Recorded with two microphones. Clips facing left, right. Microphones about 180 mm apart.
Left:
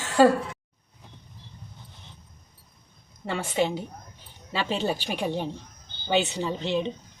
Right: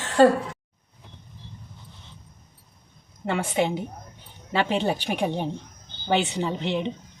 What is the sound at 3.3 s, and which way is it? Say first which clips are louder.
A woman's voice: right 2 dB; 15° right (ahead or behind).